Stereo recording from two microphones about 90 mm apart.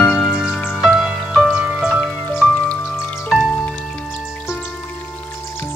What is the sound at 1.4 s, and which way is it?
Music, 10° right (ahead or behind).